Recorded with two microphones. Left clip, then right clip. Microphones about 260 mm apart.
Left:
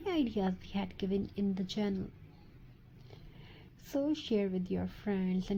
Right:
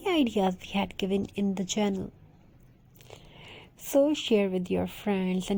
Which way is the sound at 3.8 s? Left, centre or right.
Right.